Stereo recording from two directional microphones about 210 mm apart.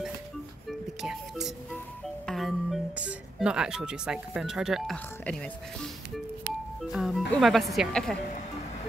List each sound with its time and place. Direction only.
0.7 s music: centre (ahead or behind)
6.8 s a woman's voice: centre (ahead or behind)